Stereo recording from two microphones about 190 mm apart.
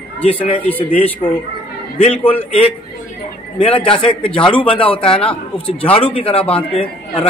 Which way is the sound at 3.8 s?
30° left (ahead or behind).